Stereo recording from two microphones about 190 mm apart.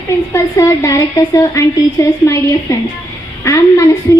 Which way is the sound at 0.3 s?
15° left (ahead or behind).